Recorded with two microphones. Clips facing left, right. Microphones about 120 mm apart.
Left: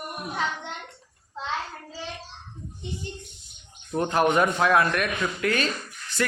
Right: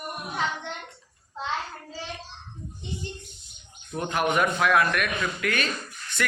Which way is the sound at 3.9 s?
35° left (ahead or behind).